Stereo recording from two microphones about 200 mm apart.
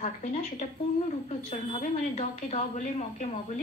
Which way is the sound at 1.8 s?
35° left (ahead or behind).